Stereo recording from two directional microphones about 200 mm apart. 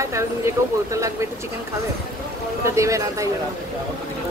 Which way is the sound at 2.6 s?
15° right (ahead or behind).